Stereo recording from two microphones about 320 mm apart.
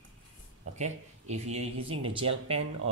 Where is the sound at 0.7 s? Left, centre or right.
Right.